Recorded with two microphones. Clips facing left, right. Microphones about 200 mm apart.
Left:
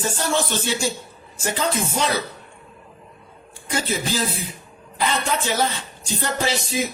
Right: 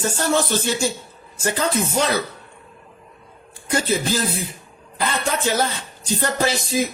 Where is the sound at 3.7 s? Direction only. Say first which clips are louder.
Right 3 dB; 45° right (ahead or behind).